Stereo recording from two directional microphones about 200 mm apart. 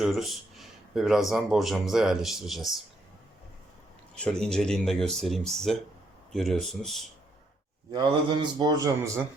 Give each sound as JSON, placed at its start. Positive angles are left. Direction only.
{"t": 0.0, "sound": "speech", "side_deg": 0}
{"t": 4.1, "sound": "speech", "side_deg": 5}
{"t": 7.9, "sound": "a man's voice", "side_deg": -20}